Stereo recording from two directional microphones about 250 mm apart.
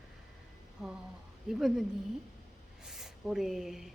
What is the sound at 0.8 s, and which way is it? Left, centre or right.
A woman's voice, centre.